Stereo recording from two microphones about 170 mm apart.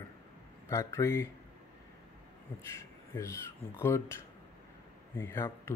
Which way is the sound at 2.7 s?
15° left (ahead or behind).